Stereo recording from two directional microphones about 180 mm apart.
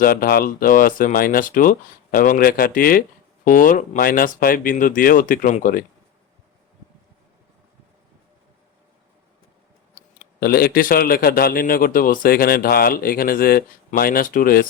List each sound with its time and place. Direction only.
0.0 s speech: 55° left (ahead or behind)
10.4 s a man's voice: 55° left (ahead or behind)